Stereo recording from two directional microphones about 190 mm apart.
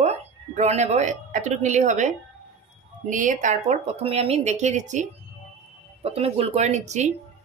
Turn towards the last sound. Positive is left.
turn(degrees=-35)  # may be behind; listen again after turning